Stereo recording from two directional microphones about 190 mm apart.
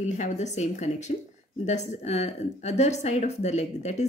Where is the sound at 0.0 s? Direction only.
40° left (ahead or behind).